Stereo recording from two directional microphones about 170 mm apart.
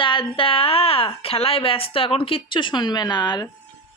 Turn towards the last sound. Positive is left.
turn(degrees=25)  # may be behind; listen again after turning